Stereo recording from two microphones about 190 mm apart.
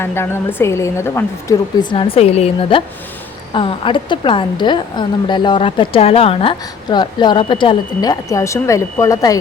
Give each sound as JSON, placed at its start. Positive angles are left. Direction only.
{"t": 0.0, "sound": "a woman's voice", "side_deg": 10}